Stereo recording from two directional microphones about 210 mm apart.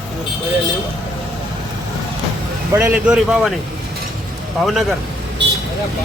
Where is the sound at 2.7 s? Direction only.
10° right (ahead or behind).